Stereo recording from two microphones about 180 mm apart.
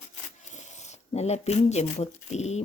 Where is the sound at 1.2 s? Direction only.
35° left (ahead or behind).